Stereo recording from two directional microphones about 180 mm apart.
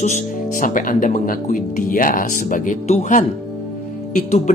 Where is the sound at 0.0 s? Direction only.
45° left (ahead or behind).